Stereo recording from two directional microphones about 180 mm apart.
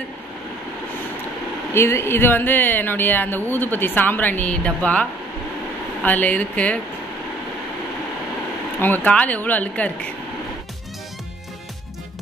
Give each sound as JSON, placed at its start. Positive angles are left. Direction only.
{"t": 1.7, "sound": "speech", "side_deg": 15}
{"t": 6.0, "sound": "speech", "side_deg": 10}
{"t": 8.8, "sound": "speech", "side_deg": 10}